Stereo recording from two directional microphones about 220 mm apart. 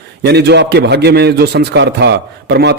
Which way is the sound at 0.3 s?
50° right (ahead or behind).